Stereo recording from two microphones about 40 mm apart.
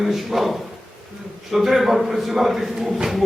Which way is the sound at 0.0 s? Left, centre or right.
Centre.